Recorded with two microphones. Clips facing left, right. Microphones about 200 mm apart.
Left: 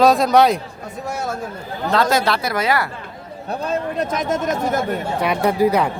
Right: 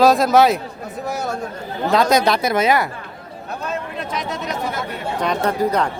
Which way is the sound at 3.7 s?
45° left (ahead or behind).